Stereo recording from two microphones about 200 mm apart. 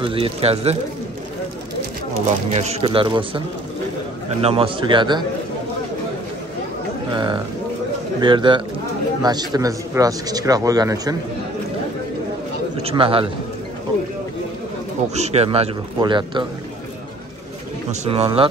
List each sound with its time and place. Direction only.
0.0 s a man's voice: 25° right (ahead or behind)
2.5 s a man's voice: 30° right (ahead or behind)
7.1 s a man's voice: 25° right (ahead or behind)
12.8 s a man's voice: 25° right (ahead or behind)
15.1 s a man's voice: 35° right (ahead or behind)
18.0 s a man's voice: 30° right (ahead or behind)